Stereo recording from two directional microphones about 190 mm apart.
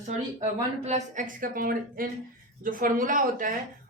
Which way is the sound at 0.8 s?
40° right (ahead or behind).